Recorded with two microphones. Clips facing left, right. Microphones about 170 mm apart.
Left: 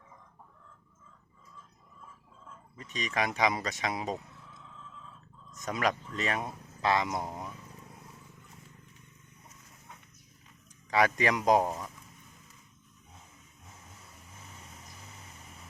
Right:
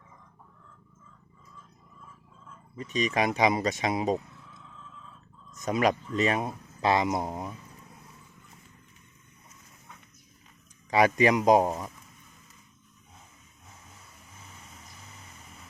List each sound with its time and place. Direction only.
2.7 s speech: 15° right (ahead or behind)
5.6 s speech: 20° right (ahead or behind)
10.9 s speech: 15° right (ahead or behind)